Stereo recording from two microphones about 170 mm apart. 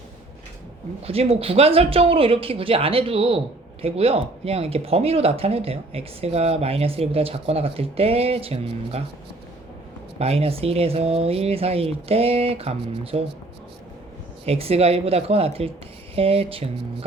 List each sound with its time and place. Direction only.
1.0 s speech: 35° right (ahead or behind)
10.2 s speech: 35° right (ahead or behind)
14.4 s speech: 35° right (ahead or behind)